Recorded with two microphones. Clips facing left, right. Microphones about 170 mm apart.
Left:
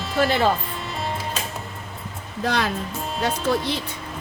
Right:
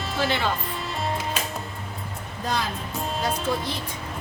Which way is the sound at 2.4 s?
75° left (ahead or behind).